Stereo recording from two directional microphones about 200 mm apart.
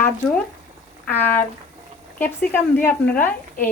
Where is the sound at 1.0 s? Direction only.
10° left (ahead or behind).